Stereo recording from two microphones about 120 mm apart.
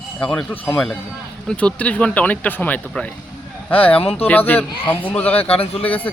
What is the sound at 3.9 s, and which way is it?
Speech, 55° left (ahead or behind).